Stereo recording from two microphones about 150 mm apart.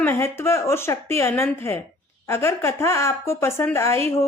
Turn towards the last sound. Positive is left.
turn(degrees=20)  # may be behind; listen again after turning